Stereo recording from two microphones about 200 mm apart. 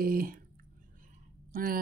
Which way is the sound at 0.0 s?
45° right (ahead or behind).